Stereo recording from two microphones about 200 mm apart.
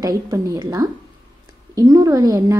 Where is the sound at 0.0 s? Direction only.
15° right (ahead or behind).